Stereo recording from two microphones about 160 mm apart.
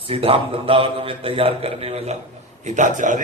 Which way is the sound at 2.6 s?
50° right (ahead or behind).